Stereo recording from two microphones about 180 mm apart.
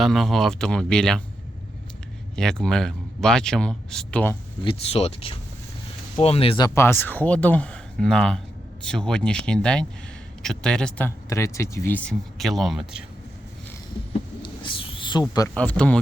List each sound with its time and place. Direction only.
0.0 s speech: centre (ahead or behind)
2.3 s speech: 5° left (ahead or behind)
4.6 s speech: 30° left (ahead or behind)
6.7 s speech: 15° left (ahead or behind); by 13.1 s 5° right (ahead or behind)
14.4 s a sound: 30° left (ahead or behind)
15.5 s speech: 5° left (ahead or behind)